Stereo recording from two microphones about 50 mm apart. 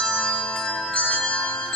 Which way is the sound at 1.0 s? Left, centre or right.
Left.